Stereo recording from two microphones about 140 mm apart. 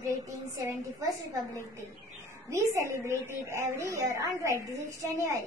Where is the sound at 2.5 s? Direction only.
20° right (ahead or behind).